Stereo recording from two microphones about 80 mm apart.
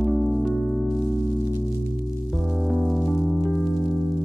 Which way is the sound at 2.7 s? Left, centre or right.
Centre.